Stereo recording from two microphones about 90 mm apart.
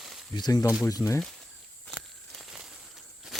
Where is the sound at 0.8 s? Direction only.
30° left (ahead or behind).